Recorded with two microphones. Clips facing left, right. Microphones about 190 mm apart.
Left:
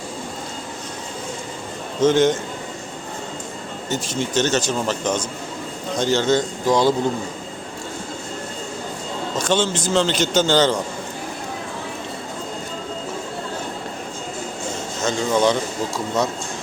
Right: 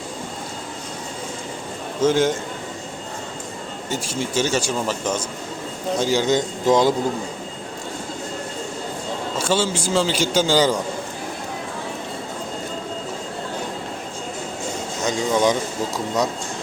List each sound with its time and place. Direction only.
2.0 s speech: 10° right (ahead or behind)
3.8 s speech: 10° right (ahead or behind)
9.4 s speech: 10° right (ahead or behind)
15.0 s speech: 15° right (ahead or behind)